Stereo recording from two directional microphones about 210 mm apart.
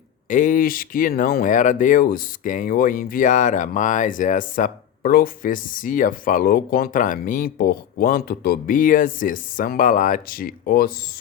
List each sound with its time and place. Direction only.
0.3 s speech: 40° left (ahead or behind)